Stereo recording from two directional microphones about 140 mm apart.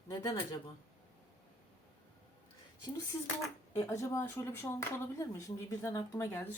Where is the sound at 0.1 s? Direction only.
25° left (ahead or behind).